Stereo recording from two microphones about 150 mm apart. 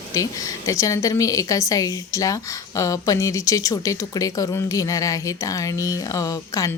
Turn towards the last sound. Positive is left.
turn(degrees=25)  # may be behind; listen again after turning